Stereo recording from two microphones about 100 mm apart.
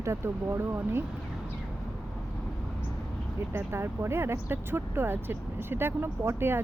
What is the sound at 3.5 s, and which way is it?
Speech, 25° right (ahead or behind).